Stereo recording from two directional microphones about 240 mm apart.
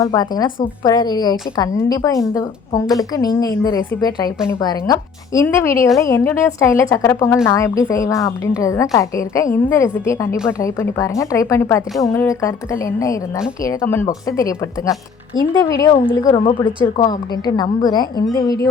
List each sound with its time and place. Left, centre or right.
0.0 s a woman's voice: centre
13.7 s a woman's voice: centre